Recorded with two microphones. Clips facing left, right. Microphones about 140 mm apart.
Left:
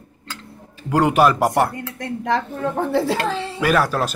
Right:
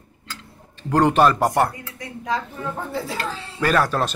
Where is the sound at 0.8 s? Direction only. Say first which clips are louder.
Left 1 dB; 5° left (ahead or behind).